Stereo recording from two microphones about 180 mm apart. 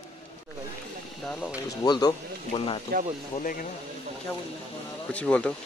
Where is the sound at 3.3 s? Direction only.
50° left (ahead or behind).